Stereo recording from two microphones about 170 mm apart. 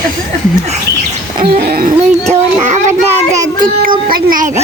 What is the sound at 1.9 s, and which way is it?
Speech, 40° right (ahead or behind).